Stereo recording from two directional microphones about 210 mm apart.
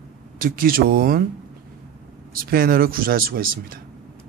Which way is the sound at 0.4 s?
45° right (ahead or behind).